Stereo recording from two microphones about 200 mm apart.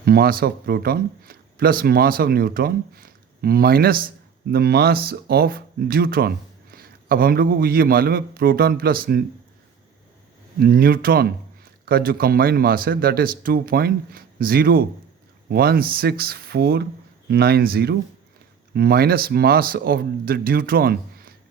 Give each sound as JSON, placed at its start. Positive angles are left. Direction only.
{"t": 0.0, "sound": "speech", "side_deg": -50}
{"t": 10.6, "sound": "speech", "side_deg": -50}